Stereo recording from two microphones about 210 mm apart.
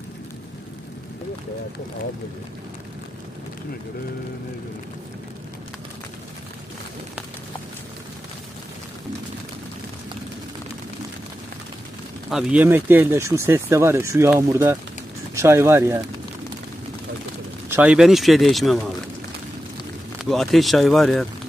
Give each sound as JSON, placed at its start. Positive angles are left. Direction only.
{"t": 12.3, "sound": "speech", "side_deg": -5}
{"t": 17.6, "sound": "speech", "side_deg": -5}
{"t": 20.2, "sound": "speech", "side_deg": 0}